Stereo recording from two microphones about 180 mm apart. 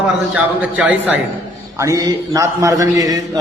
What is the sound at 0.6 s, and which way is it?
A man's voice, 10° right (ahead or behind).